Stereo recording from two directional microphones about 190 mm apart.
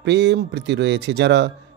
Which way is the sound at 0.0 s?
65° right (ahead or behind).